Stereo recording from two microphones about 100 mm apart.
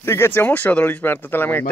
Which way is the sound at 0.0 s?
25° left (ahead or behind).